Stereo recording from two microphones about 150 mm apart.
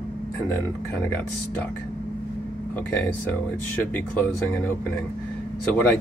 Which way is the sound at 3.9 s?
10° left (ahead or behind).